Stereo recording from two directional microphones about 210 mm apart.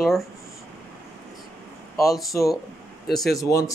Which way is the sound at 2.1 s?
Centre (ahead or behind).